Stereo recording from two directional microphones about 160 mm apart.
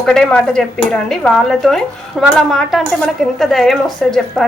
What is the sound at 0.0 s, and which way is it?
A woman's voice, 5° left (ahead or behind).